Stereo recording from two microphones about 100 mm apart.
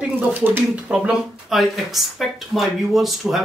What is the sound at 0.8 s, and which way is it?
Speech, 10° right (ahead or behind).